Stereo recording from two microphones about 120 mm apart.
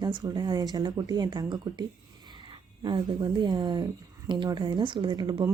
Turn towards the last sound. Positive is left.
turn(degrees=-40)  # may be behind; listen again after turning